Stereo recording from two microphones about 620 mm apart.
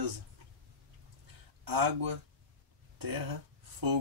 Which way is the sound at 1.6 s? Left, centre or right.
Right.